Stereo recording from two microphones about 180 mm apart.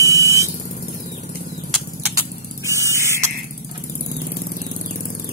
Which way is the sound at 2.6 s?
15° right (ahead or behind).